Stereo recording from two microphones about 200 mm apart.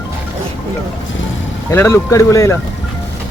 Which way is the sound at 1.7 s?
15° left (ahead or behind).